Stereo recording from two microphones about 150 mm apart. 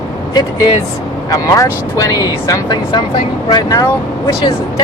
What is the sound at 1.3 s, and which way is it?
Speech, 20° left (ahead or behind).